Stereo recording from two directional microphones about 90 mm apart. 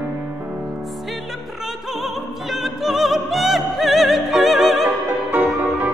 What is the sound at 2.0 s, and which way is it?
Opera, 5° right (ahead or behind).